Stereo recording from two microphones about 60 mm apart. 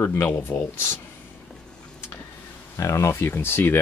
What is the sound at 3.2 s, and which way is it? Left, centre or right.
Speech, left.